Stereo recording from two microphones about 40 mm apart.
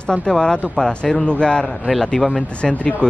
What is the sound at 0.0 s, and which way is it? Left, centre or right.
Speech, left.